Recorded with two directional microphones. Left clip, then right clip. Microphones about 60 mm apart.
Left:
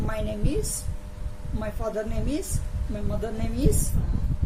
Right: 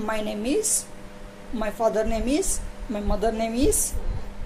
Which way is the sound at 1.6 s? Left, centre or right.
Left.